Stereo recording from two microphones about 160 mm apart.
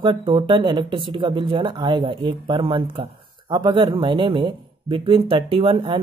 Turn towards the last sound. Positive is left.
turn(degrees=-35)  # may be behind; listen again after turning